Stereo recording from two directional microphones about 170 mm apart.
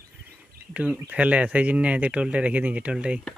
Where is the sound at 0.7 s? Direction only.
10° right (ahead or behind).